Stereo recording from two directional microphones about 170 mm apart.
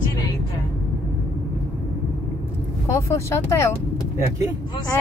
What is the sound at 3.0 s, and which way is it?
Speech, 15° left (ahead or behind).